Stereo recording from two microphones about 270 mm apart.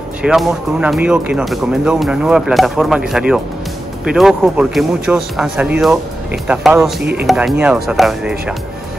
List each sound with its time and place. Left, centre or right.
0.2 s speech: centre